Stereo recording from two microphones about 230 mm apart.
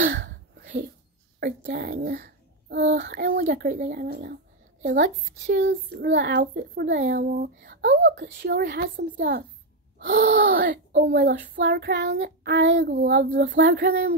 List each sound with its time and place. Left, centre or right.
0.0 s a sound: right
1.4 s a child's voice: right
5.6 s a child's voice: right
13.6 s a woman's voice: right